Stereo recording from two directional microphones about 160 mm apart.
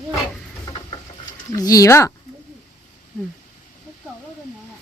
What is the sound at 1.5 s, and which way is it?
Speech, 20° left (ahead or behind).